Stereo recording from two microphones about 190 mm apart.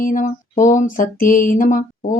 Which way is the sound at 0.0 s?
45° left (ahead or behind).